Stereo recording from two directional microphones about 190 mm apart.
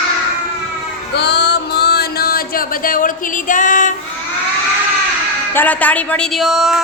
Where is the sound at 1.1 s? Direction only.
60° left (ahead or behind); by 3.9 s 40° left (ahead or behind).